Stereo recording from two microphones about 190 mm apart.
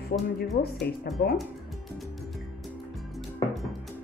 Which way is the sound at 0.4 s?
55° left (ahead or behind).